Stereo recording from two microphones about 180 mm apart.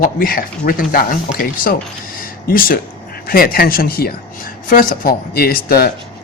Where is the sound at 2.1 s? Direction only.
55° left (ahead or behind).